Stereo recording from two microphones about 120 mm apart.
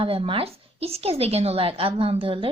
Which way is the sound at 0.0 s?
50° right (ahead or behind).